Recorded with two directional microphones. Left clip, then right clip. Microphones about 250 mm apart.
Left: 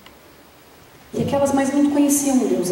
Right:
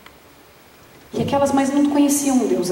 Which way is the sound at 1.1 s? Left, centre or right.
Centre.